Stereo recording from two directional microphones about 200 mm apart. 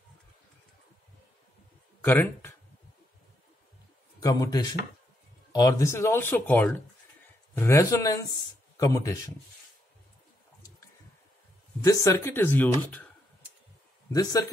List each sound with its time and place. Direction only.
2.0 s speech: 10° left (ahead or behind)
4.2 s speech: 20° left (ahead or behind)
11.8 s speech: 15° left (ahead or behind)
14.1 s speech: 20° left (ahead or behind)